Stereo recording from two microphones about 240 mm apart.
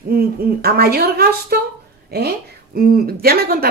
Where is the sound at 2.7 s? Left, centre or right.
Right.